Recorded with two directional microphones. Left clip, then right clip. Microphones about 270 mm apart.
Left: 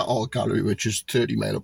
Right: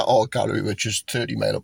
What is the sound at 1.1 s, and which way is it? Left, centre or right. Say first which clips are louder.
Speech: even; right.